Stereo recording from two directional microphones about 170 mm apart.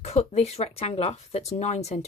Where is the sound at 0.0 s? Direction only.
40° left (ahead or behind).